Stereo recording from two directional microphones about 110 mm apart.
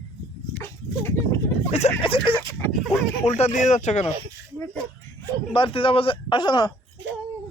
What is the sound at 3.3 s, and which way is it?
Speech, 85° left.